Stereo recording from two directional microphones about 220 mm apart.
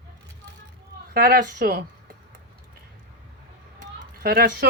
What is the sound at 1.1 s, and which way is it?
Speech, 40° right (ahead or behind).